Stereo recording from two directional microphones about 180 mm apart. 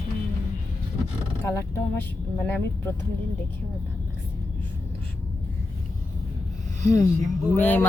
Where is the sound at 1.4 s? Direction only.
15° left (ahead or behind).